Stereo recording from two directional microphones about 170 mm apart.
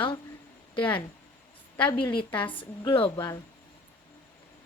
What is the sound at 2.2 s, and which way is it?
Speech, 30° left (ahead or behind).